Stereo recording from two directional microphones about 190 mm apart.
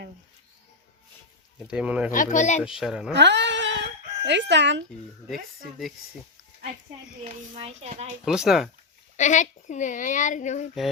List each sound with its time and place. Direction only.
1.6 s speech: 5° right (ahead or behind)
2.1 s speech: 40° left (ahead or behind)
2.6 s speech: 5° right (ahead or behind)
3.1 s chicken: 65° right (ahead or behind)
7.5 s a child's voice: 30° right (ahead or behind)
8.2 s speech: centre (ahead or behind)
9.1 s speech: 40° left (ahead or behind)